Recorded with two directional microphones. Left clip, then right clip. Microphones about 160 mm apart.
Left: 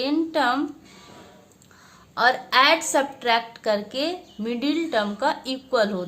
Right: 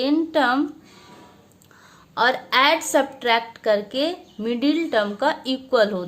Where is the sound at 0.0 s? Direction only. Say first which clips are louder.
Right 2 dB; 25° right (ahead or behind).